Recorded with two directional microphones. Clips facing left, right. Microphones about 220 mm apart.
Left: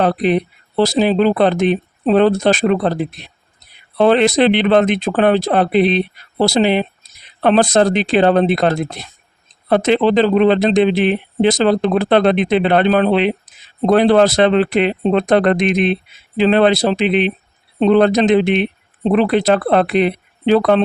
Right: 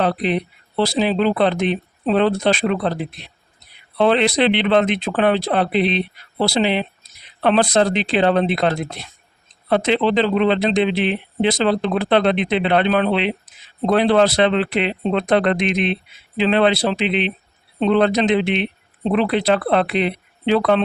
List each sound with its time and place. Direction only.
0.0 s speech: 45° left (ahead or behind)